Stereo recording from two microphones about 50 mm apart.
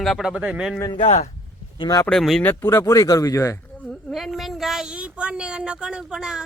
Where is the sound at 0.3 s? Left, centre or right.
Right.